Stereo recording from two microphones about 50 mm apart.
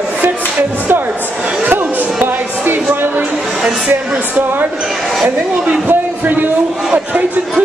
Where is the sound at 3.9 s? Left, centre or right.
Right.